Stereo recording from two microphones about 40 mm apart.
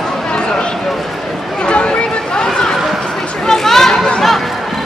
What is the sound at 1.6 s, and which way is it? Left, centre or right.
Chatter, left.